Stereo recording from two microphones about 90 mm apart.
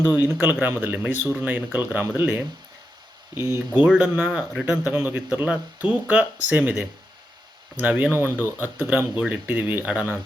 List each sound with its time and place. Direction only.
0.1 s speech: 20° right (ahead or behind)
3.8 s speech: 15° right (ahead or behind)